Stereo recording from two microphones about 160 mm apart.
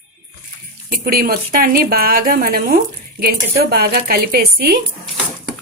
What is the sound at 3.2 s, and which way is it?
A woman's voice, 75° right (ahead or behind).